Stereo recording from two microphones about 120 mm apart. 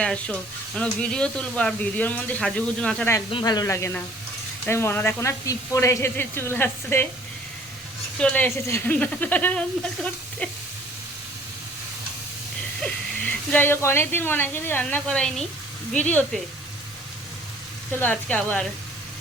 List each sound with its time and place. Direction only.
0.0 s speech: 10° left (ahead or behind)
3.4 s speech: 30° left (ahead or behind); by 7.1 s 15° left (ahead or behind)
8.2 s speech: 10° left (ahead or behind)
8.4 s speech: 20° left (ahead or behind)
12.8 s speech: 10° left (ahead or behind)
17.9 s speech: 15° left (ahead or behind)